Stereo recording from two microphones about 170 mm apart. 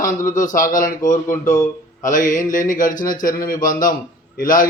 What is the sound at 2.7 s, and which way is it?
Speech, 50° left (ahead or behind).